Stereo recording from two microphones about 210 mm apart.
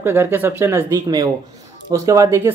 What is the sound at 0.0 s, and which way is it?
Speech, 10° right (ahead or behind).